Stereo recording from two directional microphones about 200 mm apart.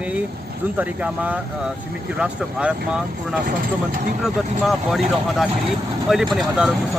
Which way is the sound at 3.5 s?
45° right (ahead or behind).